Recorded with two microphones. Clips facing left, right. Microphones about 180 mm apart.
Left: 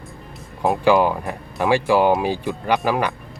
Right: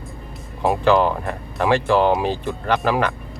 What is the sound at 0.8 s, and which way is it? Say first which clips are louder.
Speech: left 1 dB; 10° left (ahead or behind).